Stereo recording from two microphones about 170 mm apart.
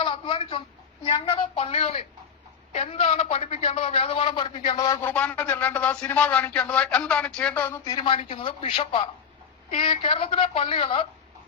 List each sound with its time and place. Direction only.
0.0 s a sound: 30° left (ahead or behind)
1.0 s a woman's voice: 35° left (ahead or behind); by 7.8 s 10° left (ahead or behind)
7.9 s a woman's voice: 25° left (ahead or behind)